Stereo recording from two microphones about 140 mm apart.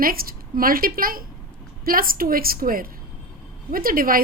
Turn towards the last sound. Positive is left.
turn(degrees=-90)